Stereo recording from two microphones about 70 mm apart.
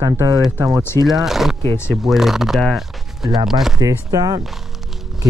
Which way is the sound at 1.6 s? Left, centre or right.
Left.